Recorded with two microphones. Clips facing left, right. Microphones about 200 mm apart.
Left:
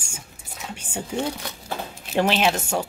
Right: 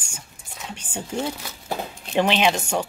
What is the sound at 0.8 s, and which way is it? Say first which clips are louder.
Speech: left 1 dB; 25° left (ahead or behind).